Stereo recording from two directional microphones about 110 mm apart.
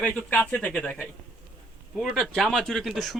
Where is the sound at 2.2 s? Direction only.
5° left (ahead or behind).